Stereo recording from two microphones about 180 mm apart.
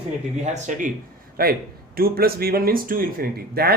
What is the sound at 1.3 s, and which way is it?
Speech, 55° right (ahead or behind).